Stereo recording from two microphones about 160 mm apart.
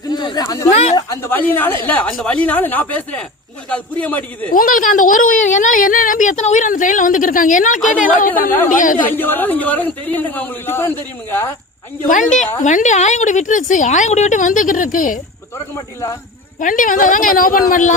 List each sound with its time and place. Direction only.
0.1 s speech: 25° left (ahead or behind)
0.7 s a woman's voice: 45° left (ahead or behind)
0.9 s speech: 15° left (ahead or behind)
4.5 s a woman's voice: 60° left (ahead or behind)
9.0 s speech: 10° left (ahead or behind)
12.0 s a woman's voice: 50° left (ahead or behind)
15.7 s speech: 20° left (ahead or behind)
16.6 s a woman's voice: 55° left (ahead or behind)